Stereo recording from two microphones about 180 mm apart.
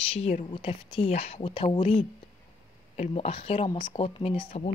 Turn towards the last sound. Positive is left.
turn(degrees=35)  # may be behind; listen again after turning